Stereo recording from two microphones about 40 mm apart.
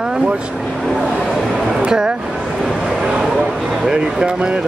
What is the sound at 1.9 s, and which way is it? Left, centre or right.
Speech, centre.